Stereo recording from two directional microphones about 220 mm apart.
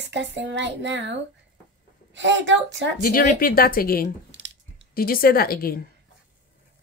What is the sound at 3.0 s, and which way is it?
A woman's voice, 40° left (ahead or behind).